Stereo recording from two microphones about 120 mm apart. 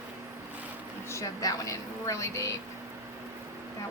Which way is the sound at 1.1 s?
30° left (ahead or behind).